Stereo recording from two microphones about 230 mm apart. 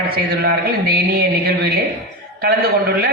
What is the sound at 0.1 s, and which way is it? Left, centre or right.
A man's voice, right.